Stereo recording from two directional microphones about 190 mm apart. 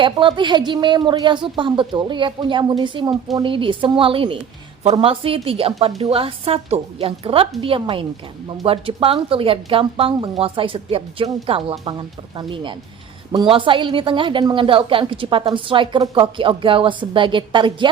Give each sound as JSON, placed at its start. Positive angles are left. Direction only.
{"t": 0.0, "sound": "a woman's voice", "side_deg": -25}